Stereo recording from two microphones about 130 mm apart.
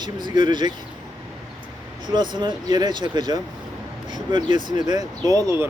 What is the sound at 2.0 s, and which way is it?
Speech, 35° right (ahead or behind).